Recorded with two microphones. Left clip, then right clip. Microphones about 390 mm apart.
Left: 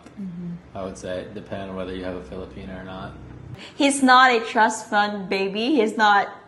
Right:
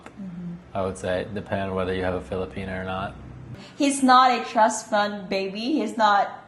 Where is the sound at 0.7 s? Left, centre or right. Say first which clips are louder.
Right 5 dB; right.